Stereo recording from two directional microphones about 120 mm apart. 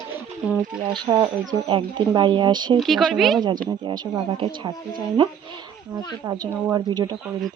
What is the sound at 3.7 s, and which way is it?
Speech, 40° right (ahead or behind).